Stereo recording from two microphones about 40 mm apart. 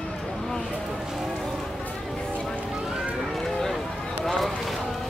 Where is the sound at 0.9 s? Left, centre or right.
Centre.